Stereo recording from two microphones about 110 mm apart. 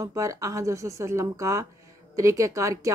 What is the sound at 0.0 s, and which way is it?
A woman's voice, 30° right (ahead or behind).